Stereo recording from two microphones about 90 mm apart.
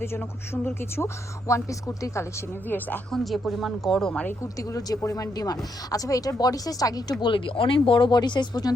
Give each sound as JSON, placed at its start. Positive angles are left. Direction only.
{"t": 0.0, "sound": "speech", "side_deg": 25}
{"t": 2.6, "sound": "speech", "side_deg": 20}
{"t": 3.1, "sound": "speech", "side_deg": 0}
{"t": 4.7, "sound": "speech", "side_deg": 40}
{"t": 7.3, "sound": "speech", "side_deg": 70}